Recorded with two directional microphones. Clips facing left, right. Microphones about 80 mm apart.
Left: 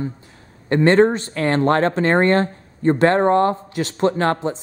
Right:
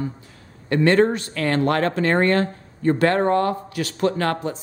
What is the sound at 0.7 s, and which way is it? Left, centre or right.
Speech, left.